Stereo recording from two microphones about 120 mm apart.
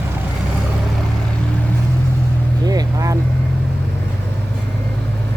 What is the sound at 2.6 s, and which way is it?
Vehicle, 30° right (ahead or behind).